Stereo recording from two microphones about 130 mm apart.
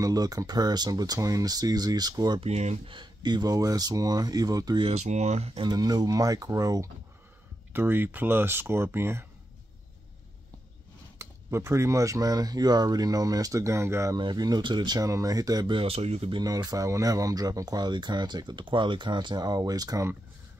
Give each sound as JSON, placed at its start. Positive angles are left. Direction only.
{"t": 0.0, "sound": "speech", "side_deg": -30}
{"t": 2.4, "sound": "speech", "side_deg": -60}
{"t": 2.9, "sound": "speech", "side_deg": -35}
{"t": 4.8, "sound": "speech", "side_deg": -60}
{"t": 5.5, "sound": "speech", "side_deg": -30}
{"t": 11.1, "sound": "speech", "side_deg": -20}
{"t": 16.3, "sound": "speech", "side_deg": -30}